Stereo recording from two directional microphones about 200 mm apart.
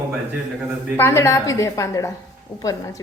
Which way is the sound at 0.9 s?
10° left (ahead or behind).